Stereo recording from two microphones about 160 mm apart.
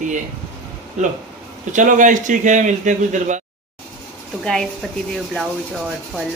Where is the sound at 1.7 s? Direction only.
50° right (ahead or behind).